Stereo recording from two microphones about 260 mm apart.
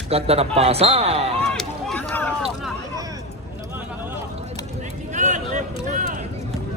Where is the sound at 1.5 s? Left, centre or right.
Centre.